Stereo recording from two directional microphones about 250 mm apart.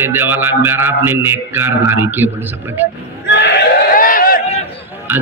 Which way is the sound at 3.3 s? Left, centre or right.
Left.